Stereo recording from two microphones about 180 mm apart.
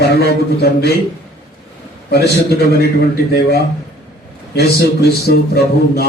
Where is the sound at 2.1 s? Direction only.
60° left (ahead or behind).